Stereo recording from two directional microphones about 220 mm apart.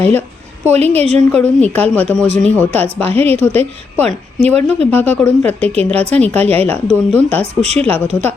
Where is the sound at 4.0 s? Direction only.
25° right (ahead or behind).